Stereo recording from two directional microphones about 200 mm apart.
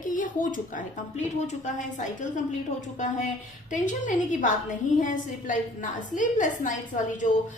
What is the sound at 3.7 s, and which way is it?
A woman's voice, 40° left (ahead or behind).